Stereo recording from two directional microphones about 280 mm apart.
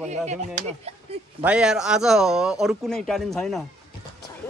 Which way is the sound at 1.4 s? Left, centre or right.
Centre.